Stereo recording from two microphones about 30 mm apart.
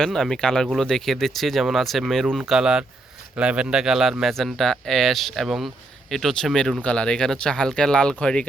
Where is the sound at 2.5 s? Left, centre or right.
Right.